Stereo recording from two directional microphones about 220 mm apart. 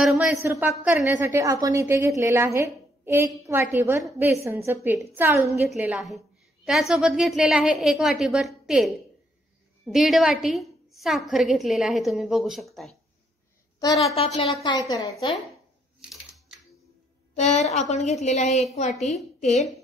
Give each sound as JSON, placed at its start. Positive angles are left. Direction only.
{"t": 0.0, "sound": "a woman's voice", "side_deg": 0}
{"t": 14.1, "sound": "a woman's voice", "side_deg": 25}
{"t": 16.0, "sound": "typewriter", "side_deg": -5}
{"t": 17.4, "sound": "a woman's voice", "side_deg": 30}